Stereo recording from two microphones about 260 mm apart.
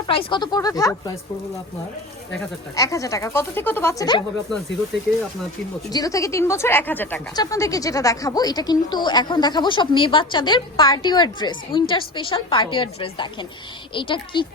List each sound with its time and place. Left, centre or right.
0.1 s a woman's voice: centre
2.7 s a woman's voice: centre
5.9 s a woman's voice: centre